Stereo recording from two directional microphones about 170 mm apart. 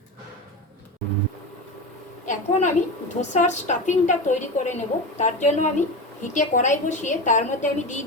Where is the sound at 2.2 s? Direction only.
45° left (ahead or behind).